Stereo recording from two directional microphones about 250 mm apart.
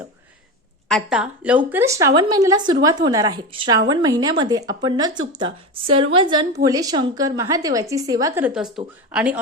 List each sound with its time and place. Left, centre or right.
0.9 s a woman's voice: centre